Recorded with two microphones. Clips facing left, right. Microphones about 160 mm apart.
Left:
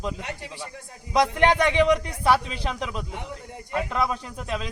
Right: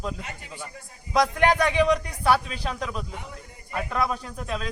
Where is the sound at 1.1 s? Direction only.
20° left (ahead or behind).